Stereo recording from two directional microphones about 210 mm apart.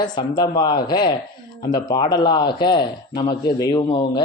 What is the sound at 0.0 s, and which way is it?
Speech, 20° left (ahead or behind).